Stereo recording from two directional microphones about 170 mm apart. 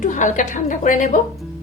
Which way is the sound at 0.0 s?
45° left (ahead or behind).